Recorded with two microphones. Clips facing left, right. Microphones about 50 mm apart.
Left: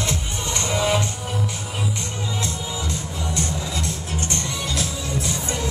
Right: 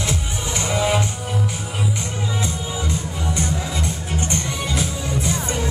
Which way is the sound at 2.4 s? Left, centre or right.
Centre.